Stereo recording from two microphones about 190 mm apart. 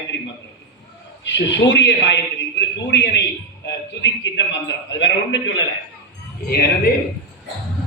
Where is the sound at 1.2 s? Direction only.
70° left (ahead or behind).